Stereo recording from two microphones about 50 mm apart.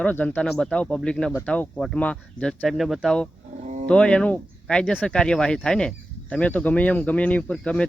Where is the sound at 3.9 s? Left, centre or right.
Left.